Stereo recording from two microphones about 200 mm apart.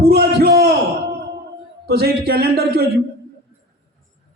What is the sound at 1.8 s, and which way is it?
A man's voice, 55° right (ahead or behind).